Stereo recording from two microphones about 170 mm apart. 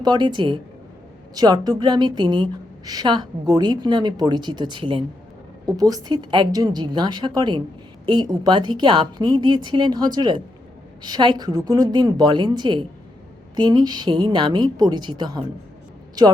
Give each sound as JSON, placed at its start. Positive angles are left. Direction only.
{"t": 0.0, "sound": "a woman's voice", "side_deg": -25}